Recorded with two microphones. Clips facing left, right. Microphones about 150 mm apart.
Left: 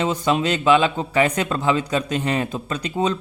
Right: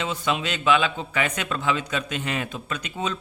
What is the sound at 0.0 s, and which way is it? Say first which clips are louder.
A man's voice: left 6 dB; 40° left (ahead or behind).